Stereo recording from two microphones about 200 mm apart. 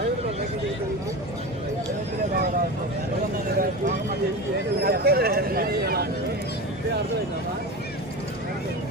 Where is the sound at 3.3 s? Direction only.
45° right (ahead or behind).